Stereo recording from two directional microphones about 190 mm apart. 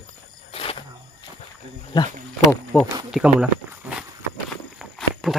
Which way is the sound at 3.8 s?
10° right (ahead or behind).